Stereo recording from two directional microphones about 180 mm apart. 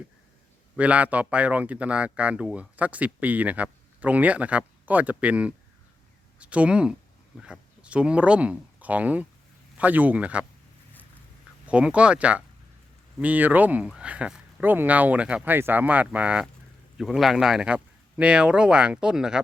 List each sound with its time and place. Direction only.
0.8 s speech: 5° right (ahead or behind)
11.6 s speech: 5° right (ahead or behind)